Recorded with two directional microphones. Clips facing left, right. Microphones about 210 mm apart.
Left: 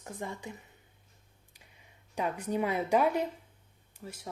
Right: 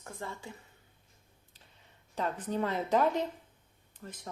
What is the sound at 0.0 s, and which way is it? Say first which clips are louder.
Speech: left 3 dB; 15° left (ahead or behind).